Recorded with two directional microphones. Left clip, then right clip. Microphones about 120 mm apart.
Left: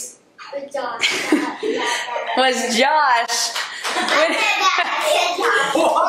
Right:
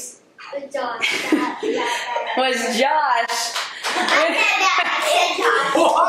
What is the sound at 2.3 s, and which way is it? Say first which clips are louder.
Speech: left 3 dB; 30° left (ahead or behind).